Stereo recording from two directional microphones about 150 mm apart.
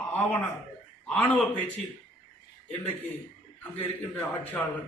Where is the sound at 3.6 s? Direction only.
10° left (ahead or behind).